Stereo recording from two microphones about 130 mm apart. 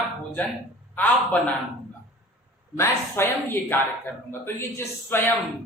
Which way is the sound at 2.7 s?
15° left (ahead or behind).